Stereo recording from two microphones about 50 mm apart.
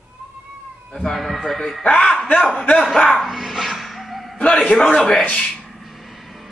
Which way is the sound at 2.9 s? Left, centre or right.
Centre.